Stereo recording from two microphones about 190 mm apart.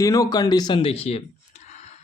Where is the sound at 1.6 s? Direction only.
35° left (ahead or behind).